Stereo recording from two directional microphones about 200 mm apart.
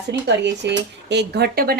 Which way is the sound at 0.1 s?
60° right (ahead or behind).